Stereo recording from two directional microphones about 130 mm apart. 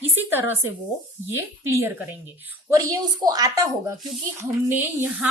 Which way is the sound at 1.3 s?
20° right (ahead or behind).